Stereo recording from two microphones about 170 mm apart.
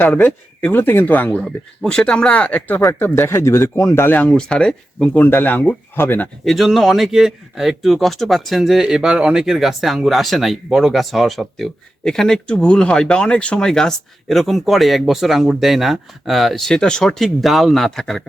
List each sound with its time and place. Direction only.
0.0 s speech: 10° left (ahead or behind)
6.4 s speech: centre (ahead or behind)